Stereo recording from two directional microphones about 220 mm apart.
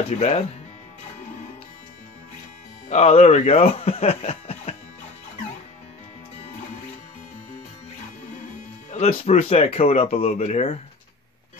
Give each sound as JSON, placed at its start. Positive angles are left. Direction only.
{"t": 0.1, "sound": "speech", "side_deg": 30}
{"t": 2.9, "sound": "speech", "side_deg": 30}
{"t": 8.9, "sound": "speech", "side_deg": 30}